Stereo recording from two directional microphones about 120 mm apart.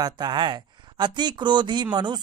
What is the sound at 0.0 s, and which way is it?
Speech, 35° right (ahead or behind).